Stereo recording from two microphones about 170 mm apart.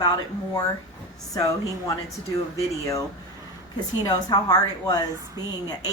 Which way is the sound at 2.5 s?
20° left (ahead or behind).